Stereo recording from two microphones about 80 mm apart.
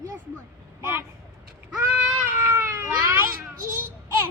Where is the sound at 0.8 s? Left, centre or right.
Right.